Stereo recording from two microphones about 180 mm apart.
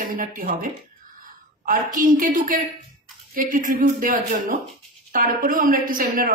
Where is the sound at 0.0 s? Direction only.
50° right (ahead or behind).